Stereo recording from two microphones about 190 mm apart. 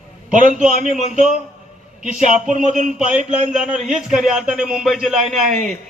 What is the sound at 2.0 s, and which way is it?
Speech, 40° right (ahead or behind).